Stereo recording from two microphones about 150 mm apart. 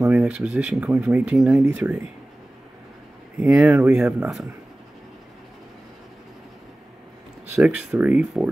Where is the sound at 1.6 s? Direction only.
20° right (ahead or behind).